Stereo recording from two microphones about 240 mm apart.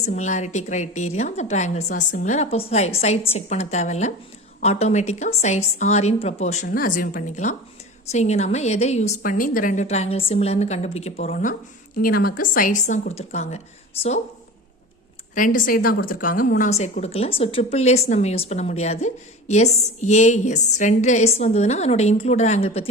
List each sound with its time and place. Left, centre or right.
0.0 s speech: left
15.4 s speech: left